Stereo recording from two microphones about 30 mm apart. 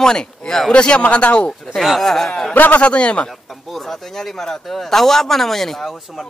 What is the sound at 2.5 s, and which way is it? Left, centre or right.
Speech, left.